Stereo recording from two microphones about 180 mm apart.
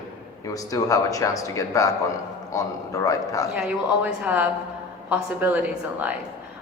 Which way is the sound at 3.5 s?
5° right (ahead or behind).